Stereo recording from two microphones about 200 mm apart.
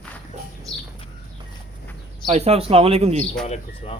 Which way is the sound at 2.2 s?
35° right (ahead or behind).